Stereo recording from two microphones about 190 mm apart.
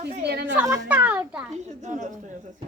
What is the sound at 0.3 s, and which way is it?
Speech, 60° right (ahead or behind).